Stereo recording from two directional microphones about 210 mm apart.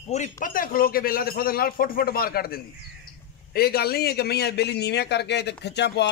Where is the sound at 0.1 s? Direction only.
35° left (ahead or behind).